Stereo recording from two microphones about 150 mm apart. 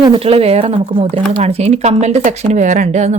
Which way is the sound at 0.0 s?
40° right (ahead or behind).